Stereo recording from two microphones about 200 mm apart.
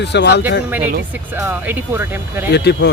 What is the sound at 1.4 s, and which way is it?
Speech, 10° right (ahead or behind).